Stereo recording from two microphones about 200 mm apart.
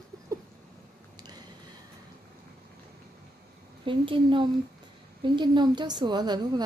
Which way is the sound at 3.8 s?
25° right (ahead or behind).